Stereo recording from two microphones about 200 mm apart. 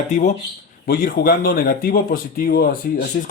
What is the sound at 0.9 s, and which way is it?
Speech, 50° left (ahead or behind).